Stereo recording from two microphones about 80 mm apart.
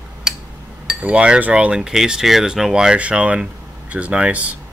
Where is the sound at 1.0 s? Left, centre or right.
Centre.